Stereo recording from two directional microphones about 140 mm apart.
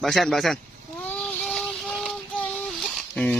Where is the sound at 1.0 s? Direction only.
5° left (ahead or behind).